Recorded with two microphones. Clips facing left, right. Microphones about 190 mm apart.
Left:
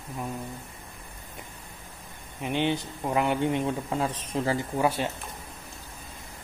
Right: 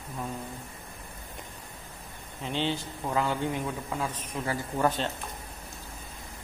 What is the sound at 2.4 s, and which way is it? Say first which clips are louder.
A man's voice: left 4 dB; 15° left (ahead or behind).